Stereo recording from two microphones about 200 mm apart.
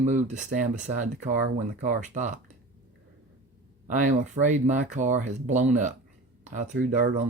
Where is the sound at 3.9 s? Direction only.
40° right (ahead or behind).